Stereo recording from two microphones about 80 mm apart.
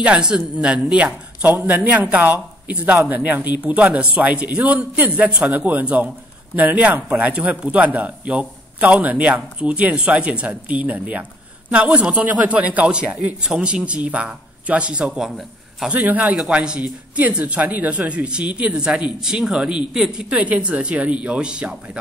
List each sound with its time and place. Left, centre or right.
0.0 s a man's voice: centre
15.9 s a man's voice: right